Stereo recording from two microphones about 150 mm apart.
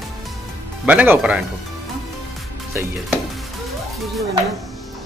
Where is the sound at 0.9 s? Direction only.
10° right (ahead or behind).